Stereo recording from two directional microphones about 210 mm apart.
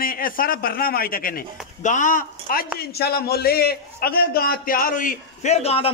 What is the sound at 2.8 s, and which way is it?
A man's voice, 50° left (ahead or behind).